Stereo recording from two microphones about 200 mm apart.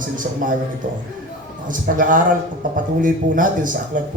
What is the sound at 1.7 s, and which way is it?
A man's voice, 40° right (ahead or behind).